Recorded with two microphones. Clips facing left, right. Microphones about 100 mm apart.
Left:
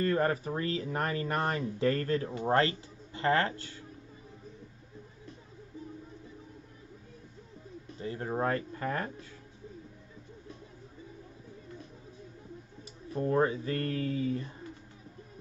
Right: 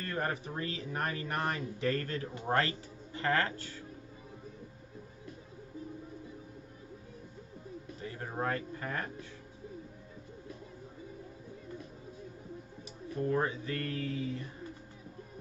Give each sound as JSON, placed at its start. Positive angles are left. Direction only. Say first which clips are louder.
{"t": 0.0, "sound": "speech", "louder": "left 7 dB", "side_deg": 35}
{"t": 8.0, "sound": "speech", "louder": "left 5 dB", "side_deg": 35}
{"t": 13.1, "sound": "speech", "louder": "left 4 dB", "side_deg": 35}